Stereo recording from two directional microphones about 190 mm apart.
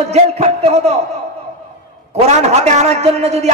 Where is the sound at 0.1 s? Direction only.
35° right (ahead or behind).